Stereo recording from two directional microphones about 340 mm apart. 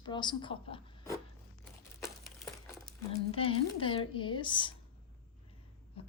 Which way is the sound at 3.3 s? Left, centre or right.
Centre.